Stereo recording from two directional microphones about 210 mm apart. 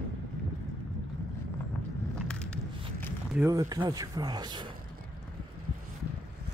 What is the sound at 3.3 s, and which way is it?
Speech, 15° right (ahead or behind).